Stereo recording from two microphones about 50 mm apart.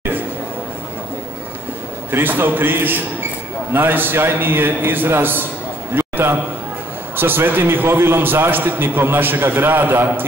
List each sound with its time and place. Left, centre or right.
2.0 s a man's voice: right